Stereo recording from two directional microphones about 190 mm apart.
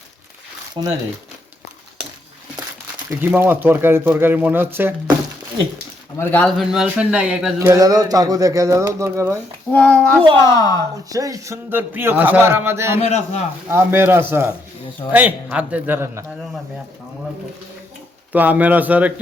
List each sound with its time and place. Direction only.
0.8 s speech: 20° right (ahead or behind)
3.1 s speech: 10° right (ahead or behind)
6.1 s speech: 5° left (ahead or behind)
7.7 s speech: 20° right (ahead or behind)
9.7 s speech: 5° left (ahead or behind)
10.4 s a woman's voice: 20° left (ahead or behind)
11.1 s speech: 20° right (ahead or behind)
13.0 s a man's voice: 35° left (ahead or behind)
13.7 s speech: 10° right (ahead or behind)
18.3 s speech: 10° right (ahead or behind)